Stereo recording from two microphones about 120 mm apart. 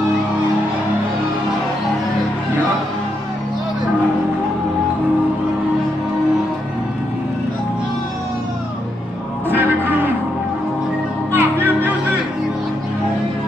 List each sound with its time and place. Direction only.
11.3 s music: 15° right (ahead or behind)